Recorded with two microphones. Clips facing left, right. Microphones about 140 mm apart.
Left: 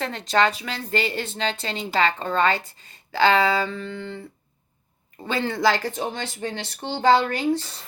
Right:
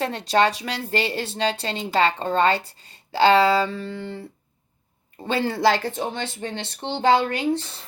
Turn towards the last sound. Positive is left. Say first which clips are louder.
# even
turn(degrees=-15)  # may be behind; listen again after turning